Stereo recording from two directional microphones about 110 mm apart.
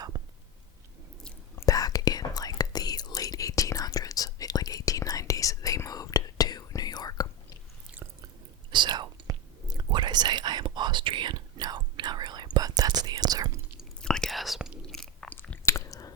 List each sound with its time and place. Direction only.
0.1 s a sound: 45° right (ahead or behind)
1.5 s whispering: 35° left (ahead or behind)
8.7 s whispering: 45° right (ahead or behind)
14.0 s chewing: 5° left (ahead or behind)
15.6 s chewing: 30° left (ahead or behind)